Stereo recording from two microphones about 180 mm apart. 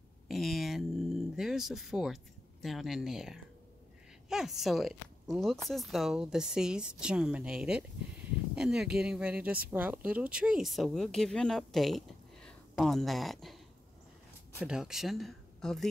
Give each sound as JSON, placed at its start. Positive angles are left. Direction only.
{"t": 0.3, "sound": "speech", "side_deg": 0}
{"t": 14.6, "sound": "speech", "side_deg": -5}